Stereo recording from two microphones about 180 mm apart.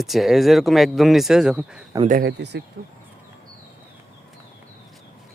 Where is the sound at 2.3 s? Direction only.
70° right (ahead or behind).